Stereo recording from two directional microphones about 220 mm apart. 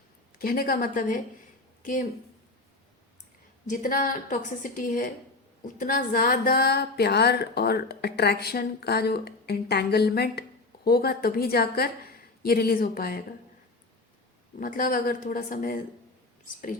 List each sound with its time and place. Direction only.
0.3 s a woman's voice: 40° left (ahead or behind)
3.7 s a woman's voice: 35° left (ahead or behind)
14.6 s a woman's voice: 40° left (ahead or behind)